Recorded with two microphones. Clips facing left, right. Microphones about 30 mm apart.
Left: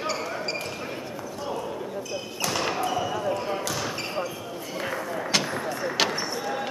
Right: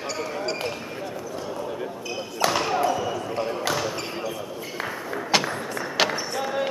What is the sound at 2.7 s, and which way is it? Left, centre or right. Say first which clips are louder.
Basketball bounce: right 3 dB; centre.